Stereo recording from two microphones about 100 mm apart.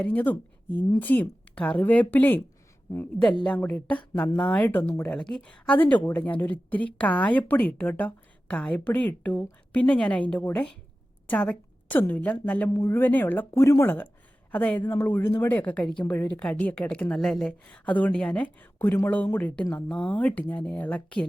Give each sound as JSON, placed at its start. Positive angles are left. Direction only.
{"t": 0.0, "sound": "speech", "side_deg": 15}
{"t": 3.4, "sound": "speech", "side_deg": 10}
{"t": 5.0, "sound": "speech", "side_deg": 5}
{"t": 12.7, "sound": "speech", "side_deg": 25}
{"t": 13.5, "sound": "speech", "side_deg": 30}